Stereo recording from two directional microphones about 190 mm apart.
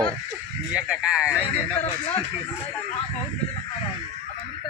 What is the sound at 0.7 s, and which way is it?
Speech, 5° right (ahead or behind).